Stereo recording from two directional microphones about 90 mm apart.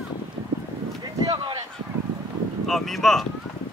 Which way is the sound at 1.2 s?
50° right (ahead or behind).